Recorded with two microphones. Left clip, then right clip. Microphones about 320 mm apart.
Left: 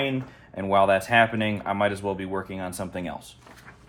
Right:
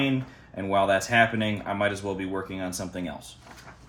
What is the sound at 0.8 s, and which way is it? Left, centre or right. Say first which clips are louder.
Speech: left 1 dB; centre.